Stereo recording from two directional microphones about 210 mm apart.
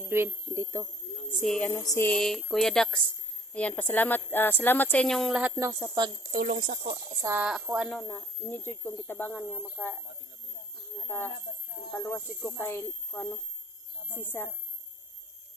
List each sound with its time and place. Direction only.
0.1 s speech: 10° right (ahead or behind)
1.3 s a sound: centre (ahead or behind)
3.5 s a woman's voice: 5° left (ahead or behind); by 6.1 s 15° right (ahead or behind)
6.3 s speech: 45° right (ahead or behind)
7.2 s a sound: 10° right (ahead or behind)
7.9 s a woman's voice: 10° left (ahead or behind)
11.9 s a woman's voice: 10° left (ahead or behind)